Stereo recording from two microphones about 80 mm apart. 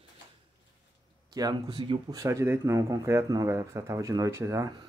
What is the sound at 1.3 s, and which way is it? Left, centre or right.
Speech, right.